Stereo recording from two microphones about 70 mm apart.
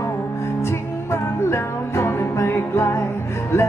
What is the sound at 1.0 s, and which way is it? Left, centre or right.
Music, left.